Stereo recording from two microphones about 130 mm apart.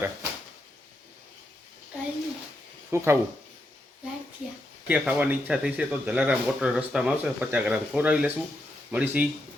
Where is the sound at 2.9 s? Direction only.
20° right (ahead or behind).